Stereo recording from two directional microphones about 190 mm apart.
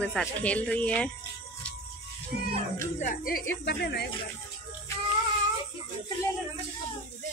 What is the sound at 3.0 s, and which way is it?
A woman's voice, 50° left (ahead or behind).